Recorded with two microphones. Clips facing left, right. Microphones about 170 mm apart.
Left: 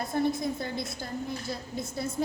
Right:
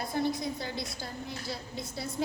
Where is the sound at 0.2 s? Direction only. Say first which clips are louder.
Left 3 dB; 50° left (ahead or behind).